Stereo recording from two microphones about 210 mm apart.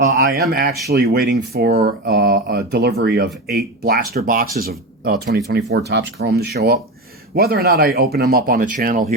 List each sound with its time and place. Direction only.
0.2 s speech: 50° right (ahead or behind)